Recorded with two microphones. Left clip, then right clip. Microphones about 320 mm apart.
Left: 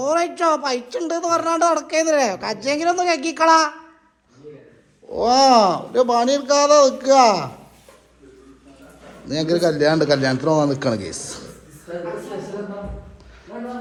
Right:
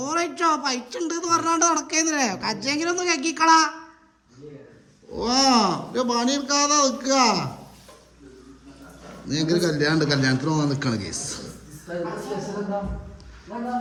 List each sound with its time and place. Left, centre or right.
0.0 s a man's voice: centre
5.1 s a man's voice: centre
9.2 s a man's voice: centre
13.5 s a man's voice: centre